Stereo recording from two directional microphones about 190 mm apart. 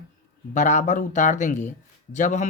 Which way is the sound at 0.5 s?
40° left (ahead or behind).